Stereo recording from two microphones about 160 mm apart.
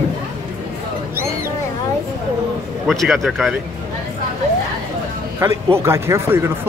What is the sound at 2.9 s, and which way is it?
Speech, centre (ahead or behind).